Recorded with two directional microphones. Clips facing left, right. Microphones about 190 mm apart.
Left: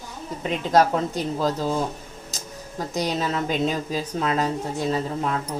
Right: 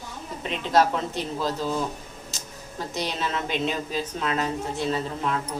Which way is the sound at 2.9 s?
40° left (ahead or behind).